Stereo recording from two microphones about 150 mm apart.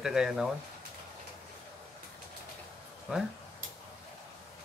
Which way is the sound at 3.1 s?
5° right (ahead or behind).